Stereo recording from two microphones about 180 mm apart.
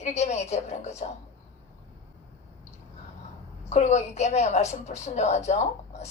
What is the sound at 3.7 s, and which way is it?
A woman's voice, 40° left (ahead or behind).